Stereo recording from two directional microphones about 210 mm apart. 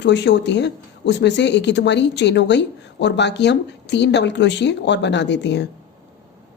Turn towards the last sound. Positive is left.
turn(degrees=55)  # may be behind; listen again after turning